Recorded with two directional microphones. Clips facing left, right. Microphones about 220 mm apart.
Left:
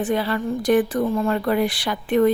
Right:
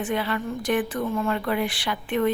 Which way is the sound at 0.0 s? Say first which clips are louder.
Left 4 dB; 35° left (ahead or behind).